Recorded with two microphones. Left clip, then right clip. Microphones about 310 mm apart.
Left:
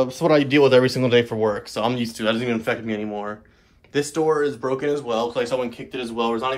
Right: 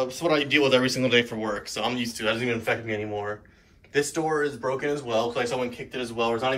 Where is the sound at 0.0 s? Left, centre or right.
Left.